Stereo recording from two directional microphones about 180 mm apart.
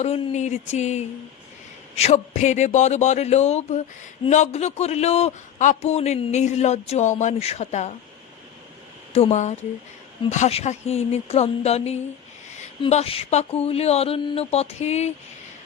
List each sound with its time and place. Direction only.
0.0 s a man's voice: 40° left (ahead or behind)
9.1 s a man's voice: 40° left (ahead or behind)